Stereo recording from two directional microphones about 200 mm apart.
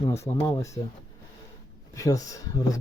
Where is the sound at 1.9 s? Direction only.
15° left (ahead or behind).